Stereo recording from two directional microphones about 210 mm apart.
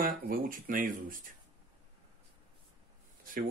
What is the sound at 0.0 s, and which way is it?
Speech, 45° right (ahead or behind).